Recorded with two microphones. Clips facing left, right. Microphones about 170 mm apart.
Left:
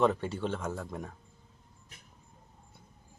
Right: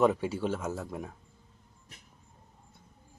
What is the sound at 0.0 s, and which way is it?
Speech, 5° right (ahead or behind).